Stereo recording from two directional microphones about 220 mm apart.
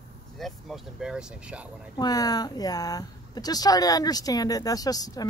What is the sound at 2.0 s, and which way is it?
Speech, 15° left (ahead or behind).